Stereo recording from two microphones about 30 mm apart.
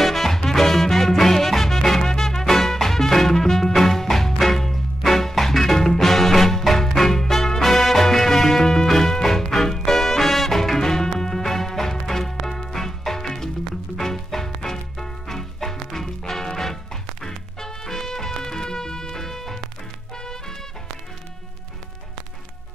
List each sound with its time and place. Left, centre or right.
0.0 s music: centre
10.6 s music: centre